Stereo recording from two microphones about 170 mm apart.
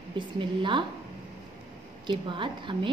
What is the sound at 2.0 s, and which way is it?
Speech, 30° right (ahead or behind).